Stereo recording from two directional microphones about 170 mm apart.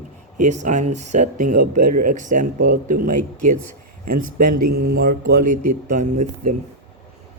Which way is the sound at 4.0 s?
55° right (ahead or behind).